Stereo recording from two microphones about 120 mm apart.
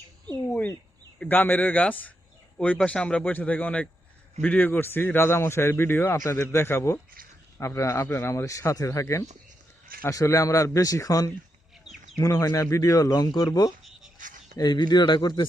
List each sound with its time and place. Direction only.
1.2 s a man's voice: 15° left (ahead or behind); by 15.4 s 40° left (ahead or behind)